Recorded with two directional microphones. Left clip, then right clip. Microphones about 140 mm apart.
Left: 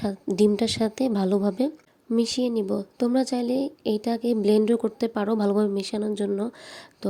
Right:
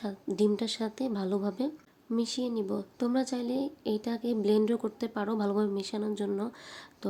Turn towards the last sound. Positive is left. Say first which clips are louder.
# left 6 dB
turn(degrees=40)  # may be behind; listen again after turning